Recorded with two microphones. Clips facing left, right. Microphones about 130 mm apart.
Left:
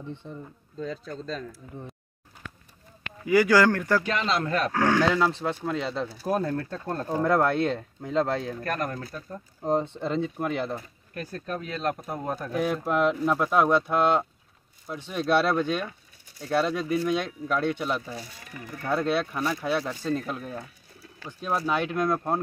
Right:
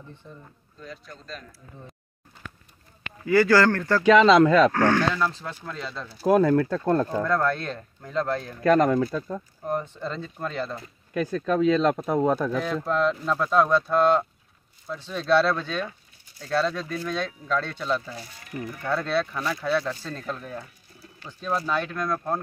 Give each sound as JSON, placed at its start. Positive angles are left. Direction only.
{"t": 0.2, "sound": "speech", "side_deg": 25}
{"t": 3.3, "sound": "speech", "side_deg": 15}
{"t": 4.0, "sound": "speech", "side_deg": -90}
{"t": 4.7, "sound": "speech", "side_deg": 10}
{"t": 6.2, "sound": "speech", "side_deg": -90}
{"t": 7.2, "sound": "speech", "side_deg": 20}
{"t": 8.7, "sound": "speech", "side_deg": -90}
{"t": 9.6, "sound": "speech", "side_deg": 25}
{"t": 11.1, "sound": "speech", "side_deg": -90}
{"t": 12.6, "sound": "speech", "side_deg": 15}